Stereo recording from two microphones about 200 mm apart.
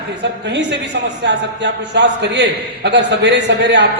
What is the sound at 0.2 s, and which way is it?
Speech, 60° right (ahead or behind).